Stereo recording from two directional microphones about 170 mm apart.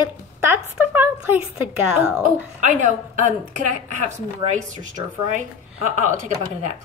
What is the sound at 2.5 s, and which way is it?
A woman's voice, 50° right (ahead or behind).